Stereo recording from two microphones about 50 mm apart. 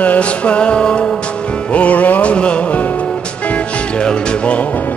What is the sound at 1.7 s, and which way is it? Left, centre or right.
Music, left.